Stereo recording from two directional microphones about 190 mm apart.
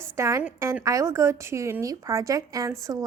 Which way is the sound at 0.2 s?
15° right (ahead or behind).